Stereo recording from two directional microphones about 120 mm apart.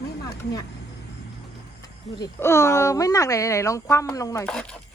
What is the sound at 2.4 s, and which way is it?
Speech, 25° left (ahead or behind).